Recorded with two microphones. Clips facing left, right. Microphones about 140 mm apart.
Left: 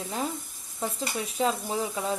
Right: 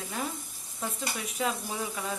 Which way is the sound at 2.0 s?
25° left (ahead or behind).